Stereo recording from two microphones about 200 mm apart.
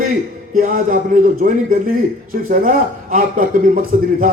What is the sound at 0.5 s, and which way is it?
A man's voice, 40° right (ahead or behind).